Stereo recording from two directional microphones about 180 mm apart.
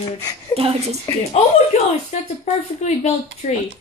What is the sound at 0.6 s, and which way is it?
Speech, 35° right (ahead or behind).